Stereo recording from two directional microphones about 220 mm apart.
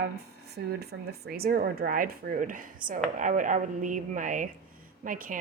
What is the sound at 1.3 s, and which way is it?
A woman's voice, 45° right (ahead or behind).